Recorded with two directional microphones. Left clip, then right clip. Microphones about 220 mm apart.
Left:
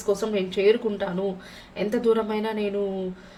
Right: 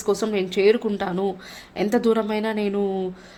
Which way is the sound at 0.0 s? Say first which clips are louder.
Right 2 dB; 45° right (ahead or behind).